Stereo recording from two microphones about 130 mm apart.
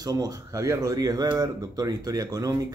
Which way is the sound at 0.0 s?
25° right (ahead or behind).